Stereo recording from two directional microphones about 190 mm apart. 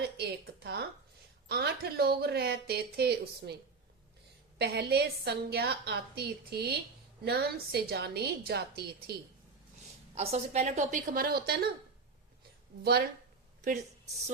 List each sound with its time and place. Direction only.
0.2 s a woman's voice: 60° right (ahead or behind)
10.2 s a woman's voice: 35° right (ahead or behind); by 11.6 s 55° right (ahead or behind)
12.8 s a woman's voice: 55° right (ahead or behind)